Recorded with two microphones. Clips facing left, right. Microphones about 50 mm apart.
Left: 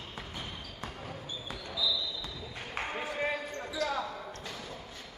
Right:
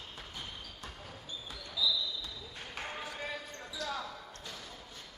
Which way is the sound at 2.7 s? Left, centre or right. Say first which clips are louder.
Left 7 dB; left.